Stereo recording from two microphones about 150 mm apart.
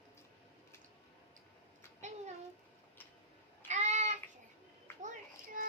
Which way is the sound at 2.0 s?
50° right (ahead or behind).